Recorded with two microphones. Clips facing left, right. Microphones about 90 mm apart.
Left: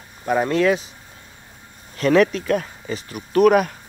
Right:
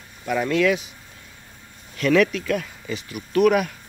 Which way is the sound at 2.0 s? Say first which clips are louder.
Left 2 dB; 35° left (ahead or behind).